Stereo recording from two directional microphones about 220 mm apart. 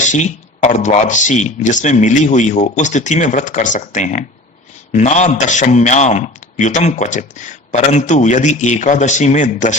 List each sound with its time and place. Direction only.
0.0 s a man's voice: 35° left (ahead or behind)